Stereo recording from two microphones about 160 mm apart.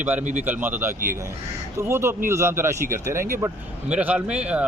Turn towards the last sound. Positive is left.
turn(degrees=-5)  # may be behind; listen again after turning